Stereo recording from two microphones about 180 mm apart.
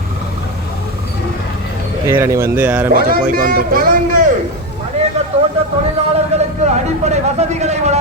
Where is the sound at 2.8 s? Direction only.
55° right (ahead or behind).